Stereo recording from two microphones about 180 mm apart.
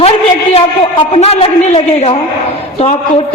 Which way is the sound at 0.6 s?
35° left (ahead or behind).